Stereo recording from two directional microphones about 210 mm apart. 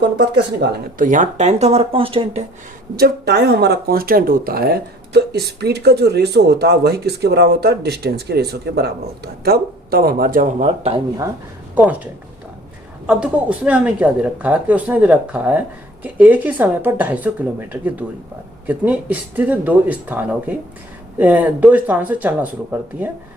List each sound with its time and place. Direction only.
0.3 s speech: 45° right (ahead or behind); by 2.4 s 25° right (ahead or behind)
3.0 s speech: 50° right (ahead or behind); by 11.0 s 30° right (ahead or behind)
11.7 s speech: 5° right (ahead or behind)
13.1 s a woman's voice: 5° right (ahead or behind)